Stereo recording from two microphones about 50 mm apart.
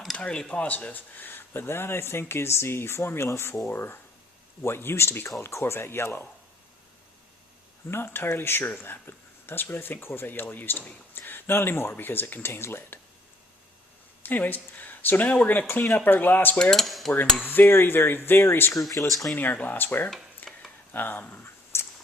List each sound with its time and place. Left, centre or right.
0.2 s speech: left
7.9 s speech: left
14.2 s speech: left
15.8 s speech: left
16.0 s speech: left
16.7 s cutlery: centre
17.4 s speech: left
20.4 s a sound: left
20.9 s speech: left
21.4 s a sound: left